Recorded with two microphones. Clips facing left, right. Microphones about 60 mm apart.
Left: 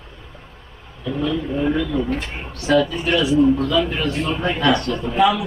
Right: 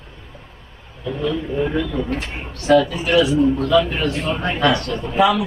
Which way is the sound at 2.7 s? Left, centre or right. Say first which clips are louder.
Right 3 dB; right.